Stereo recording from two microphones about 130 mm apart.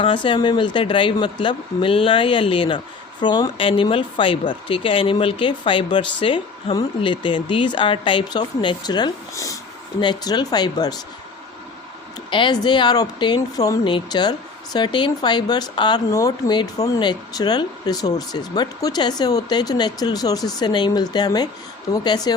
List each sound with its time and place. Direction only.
0.0 s speech: 40° left (ahead or behind)
12.3 s speech: 35° left (ahead or behind)